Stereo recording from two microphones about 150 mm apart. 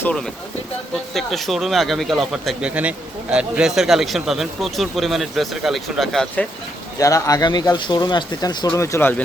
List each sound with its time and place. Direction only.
0.0 s speech: 5° left (ahead or behind)
7.0 s speech: 20° left (ahead or behind)